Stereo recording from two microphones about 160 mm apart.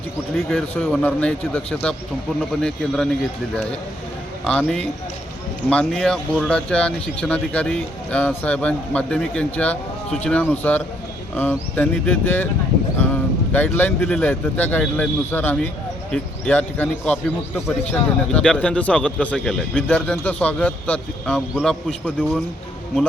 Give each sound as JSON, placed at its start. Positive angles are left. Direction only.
{"t": 0.3, "sound": "a man's voice", "side_deg": 5}
{"t": 4.4, "sound": "a man's voice", "side_deg": 5}
{"t": 13.5, "sound": "a man's voice", "side_deg": 10}